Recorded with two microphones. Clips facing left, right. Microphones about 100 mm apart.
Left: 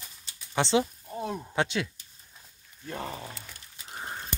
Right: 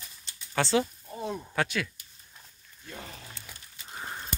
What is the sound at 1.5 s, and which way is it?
Speech, 25° left (ahead or behind).